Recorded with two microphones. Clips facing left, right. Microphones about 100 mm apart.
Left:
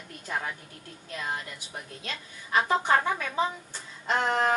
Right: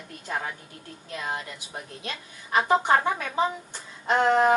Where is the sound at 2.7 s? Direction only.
20° right (ahead or behind).